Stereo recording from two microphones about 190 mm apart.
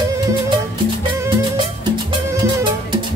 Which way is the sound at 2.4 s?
20° right (ahead or behind).